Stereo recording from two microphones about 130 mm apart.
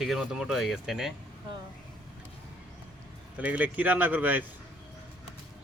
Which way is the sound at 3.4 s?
10° right (ahead or behind).